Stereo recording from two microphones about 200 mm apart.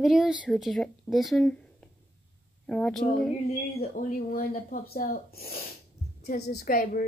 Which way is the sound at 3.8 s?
45° left (ahead or behind).